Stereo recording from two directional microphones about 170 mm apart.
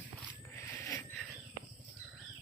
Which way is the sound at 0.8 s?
15° left (ahead or behind).